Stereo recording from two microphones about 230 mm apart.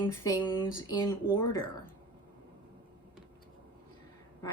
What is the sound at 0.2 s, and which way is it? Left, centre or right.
Speech, centre.